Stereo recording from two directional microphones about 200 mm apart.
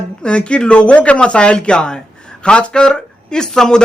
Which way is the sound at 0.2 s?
5° left (ahead or behind).